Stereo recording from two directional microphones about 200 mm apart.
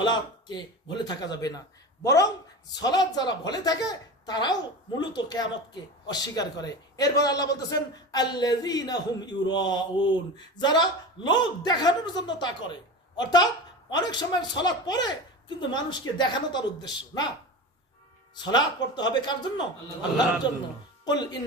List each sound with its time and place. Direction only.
0.0 s speech: 20° left (ahead or behind)
18.5 s speech: 20° left (ahead or behind)